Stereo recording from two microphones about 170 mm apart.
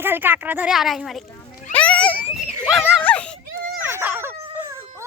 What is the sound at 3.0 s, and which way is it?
Whimper, 10° left (ahead or behind).